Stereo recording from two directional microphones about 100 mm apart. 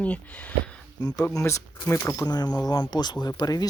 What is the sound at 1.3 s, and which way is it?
Speech, 30° left (ahead or behind).